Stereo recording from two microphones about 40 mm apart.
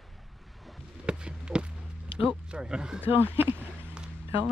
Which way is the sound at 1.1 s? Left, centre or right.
Right.